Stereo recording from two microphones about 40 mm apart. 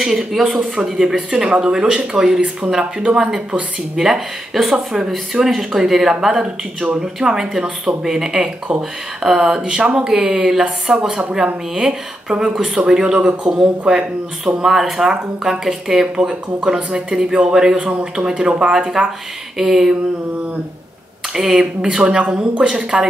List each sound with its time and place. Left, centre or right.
0.0 s speech: centre
1.0 s a woman's voice: centre
5.1 s speech: centre
9.6 s a woman's voice: right
14.6 s speech: centre
16.2 s a woman's voice: right; by 19.9 s centre
21.3 s a woman's voice: centre